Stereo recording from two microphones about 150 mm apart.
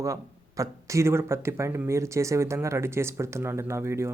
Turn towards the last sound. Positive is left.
turn(degrees=-15)  # may be behind; listen again after turning